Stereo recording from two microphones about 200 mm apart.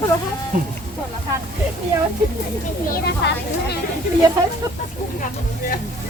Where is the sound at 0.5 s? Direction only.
40° right (ahead or behind).